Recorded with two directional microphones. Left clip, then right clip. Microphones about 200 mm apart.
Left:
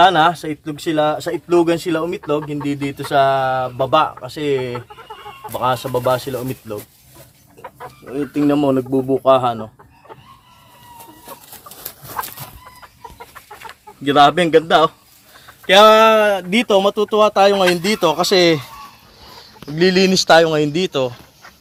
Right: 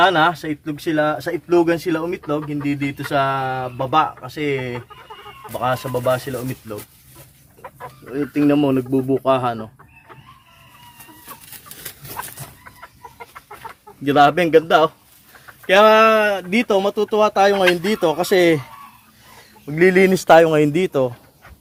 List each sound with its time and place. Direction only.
0.0 s speech: 5° right (ahead or behind)
7.6 s chicken: 15° left (ahead or behind)
8.3 s speech: 5° left (ahead or behind)
14.0 s speech: centre (ahead or behind)
19.7 s speech: 20° right (ahead or behind)